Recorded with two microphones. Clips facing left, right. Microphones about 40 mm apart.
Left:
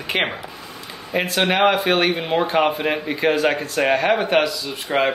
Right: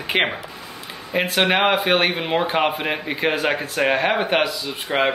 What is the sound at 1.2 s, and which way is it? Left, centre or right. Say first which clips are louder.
Speech: left 1 dB; right.